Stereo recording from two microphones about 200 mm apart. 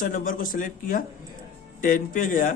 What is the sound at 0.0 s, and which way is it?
Speech, 45° left (ahead or behind).